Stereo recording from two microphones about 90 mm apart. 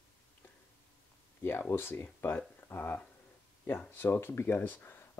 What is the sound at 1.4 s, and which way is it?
Speech, 25° left (ahead or behind).